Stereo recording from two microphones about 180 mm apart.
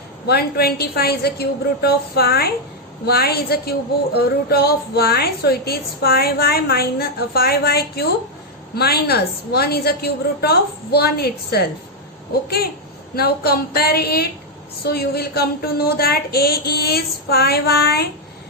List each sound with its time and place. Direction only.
0.3 s speech: 60° left (ahead or behind)